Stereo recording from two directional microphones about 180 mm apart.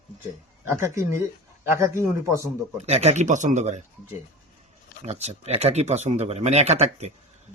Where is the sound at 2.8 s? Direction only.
35° right (ahead or behind).